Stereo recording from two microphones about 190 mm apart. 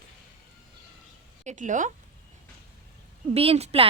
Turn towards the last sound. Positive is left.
turn(degrees=-30)  # may be behind; listen again after turning